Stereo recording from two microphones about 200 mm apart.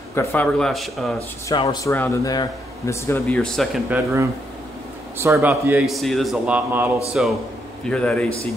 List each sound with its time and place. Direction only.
0.1 s a man's voice: 10° left (ahead or behind)
1.5 s speech: 20° left (ahead or behind)
3.3 s a man's voice: centre (ahead or behind)
3.9 s a man's voice: 15° right (ahead or behind)
5.9 s a man's voice: centre (ahead or behind)
7.8 s a man's voice: 5° left (ahead or behind)